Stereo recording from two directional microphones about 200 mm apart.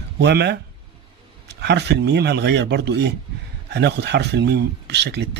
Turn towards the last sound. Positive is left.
turn(degrees=-60)  # may be behind; listen again after turning